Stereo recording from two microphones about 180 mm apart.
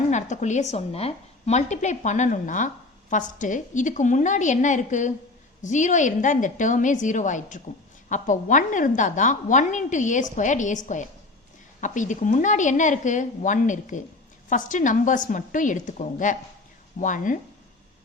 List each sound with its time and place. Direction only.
0.1 s a woman's voice: 40° left (ahead or behind)